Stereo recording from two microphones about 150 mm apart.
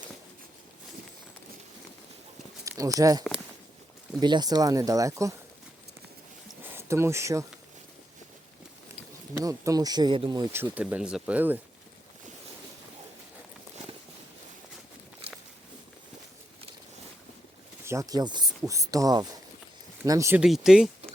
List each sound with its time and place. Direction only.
2.6 s speech: 20° right (ahead or behind)
6.6 s a sound: 15° right (ahead or behind)
9.4 s speech: 25° right (ahead or behind)
10.5 s speech: 10° right (ahead or behind)
17.8 s speech: 20° right (ahead or behind)
20.4 s speech: 5° right (ahead or behind)